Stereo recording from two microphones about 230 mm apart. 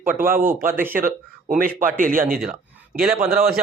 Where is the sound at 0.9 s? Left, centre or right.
Right.